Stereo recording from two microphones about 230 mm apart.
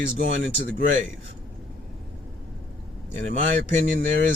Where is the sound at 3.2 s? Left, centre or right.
Right.